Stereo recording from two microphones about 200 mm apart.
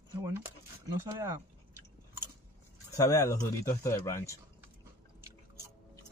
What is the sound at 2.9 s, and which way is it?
Speech, 15° left (ahead or behind).